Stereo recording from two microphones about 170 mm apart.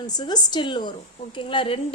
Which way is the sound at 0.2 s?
25° left (ahead or behind).